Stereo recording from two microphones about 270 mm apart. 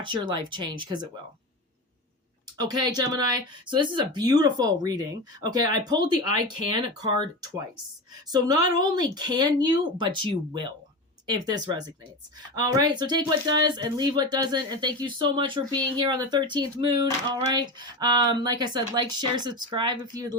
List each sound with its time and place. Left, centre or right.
0.0 s speech: centre
2.6 s speech: centre